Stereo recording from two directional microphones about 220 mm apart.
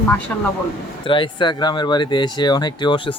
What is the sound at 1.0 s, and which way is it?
Speech, 20° left (ahead or behind).